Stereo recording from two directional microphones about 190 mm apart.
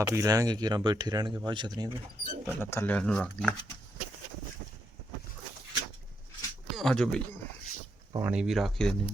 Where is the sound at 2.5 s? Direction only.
10° left (ahead or behind).